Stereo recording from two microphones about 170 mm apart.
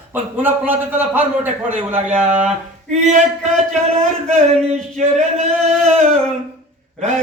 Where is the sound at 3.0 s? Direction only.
40° right (ahead or behind).